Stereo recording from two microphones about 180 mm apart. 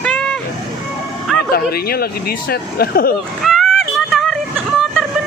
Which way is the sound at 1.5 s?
55° left (ahead or behind).